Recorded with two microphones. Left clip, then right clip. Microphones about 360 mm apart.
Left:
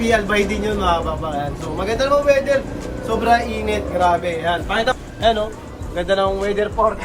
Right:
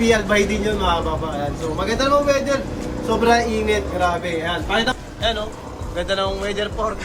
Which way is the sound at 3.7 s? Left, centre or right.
Centre.